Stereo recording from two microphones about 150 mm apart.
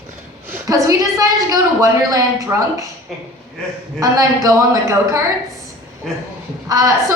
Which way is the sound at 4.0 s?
25° right (ahead or behind).